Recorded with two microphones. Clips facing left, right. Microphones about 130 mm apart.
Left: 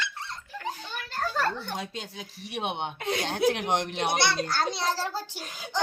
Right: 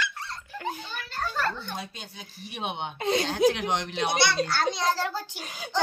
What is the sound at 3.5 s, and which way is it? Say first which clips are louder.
Speech: left 1 dB; 55° left (ahead or behind).